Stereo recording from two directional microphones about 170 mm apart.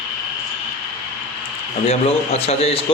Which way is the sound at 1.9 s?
35° left (ahead or behind).